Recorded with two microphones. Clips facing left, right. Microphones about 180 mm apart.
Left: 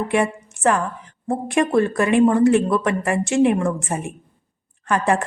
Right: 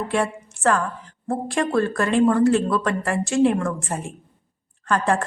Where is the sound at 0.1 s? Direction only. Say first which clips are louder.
Left 3 dB; 15° left (ahead or behind).